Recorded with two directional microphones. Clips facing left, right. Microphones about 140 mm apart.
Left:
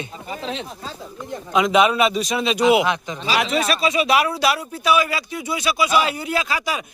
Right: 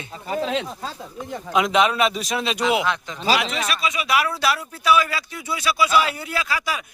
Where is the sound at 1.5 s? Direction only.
Centre (ahead or behind).